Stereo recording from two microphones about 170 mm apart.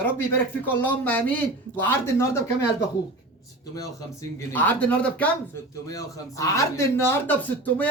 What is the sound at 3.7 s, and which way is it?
A man's voice, 15° left (ahead or behind).